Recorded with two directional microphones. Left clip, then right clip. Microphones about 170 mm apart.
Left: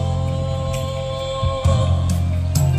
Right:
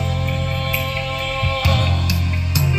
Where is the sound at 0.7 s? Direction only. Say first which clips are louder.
Right 6 dB; 50° left (ahead or behind); by 2.6 s 75° left (ahead or behind).